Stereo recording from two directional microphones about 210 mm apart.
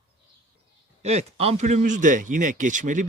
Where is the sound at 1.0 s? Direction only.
30° right (ahead or behind).